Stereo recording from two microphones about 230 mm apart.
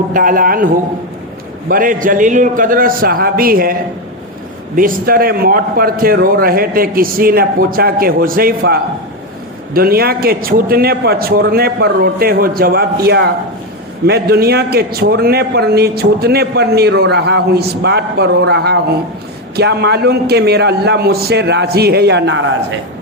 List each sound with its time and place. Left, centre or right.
0.1 s a man's voice: right
4.8 s a man's voice: right